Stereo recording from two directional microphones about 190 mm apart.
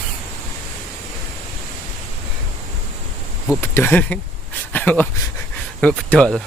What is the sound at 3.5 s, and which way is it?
Speech, 10° left (ahead or behind).